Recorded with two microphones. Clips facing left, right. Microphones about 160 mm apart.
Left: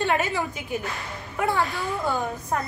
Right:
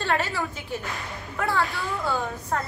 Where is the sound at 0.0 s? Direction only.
20° left (ahead or behind).